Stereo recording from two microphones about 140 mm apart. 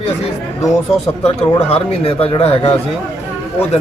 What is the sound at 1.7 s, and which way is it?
Speech, 45° left (ahead or behind).